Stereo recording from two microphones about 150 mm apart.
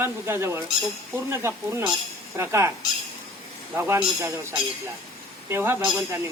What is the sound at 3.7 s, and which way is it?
Speech, 15° right (ahead or behind).